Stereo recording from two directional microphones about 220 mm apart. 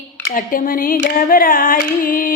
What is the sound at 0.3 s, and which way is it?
Female singing, 40° left (ahead or behind).